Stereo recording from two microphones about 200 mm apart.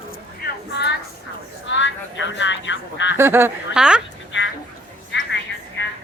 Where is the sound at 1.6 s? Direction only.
65° left (ahead or behind).